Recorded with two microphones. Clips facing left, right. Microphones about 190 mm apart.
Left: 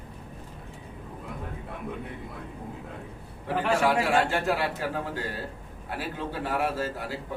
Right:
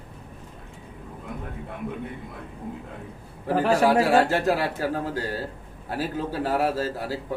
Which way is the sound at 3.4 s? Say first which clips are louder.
Right 5 dB; 40° right (ahead or behind).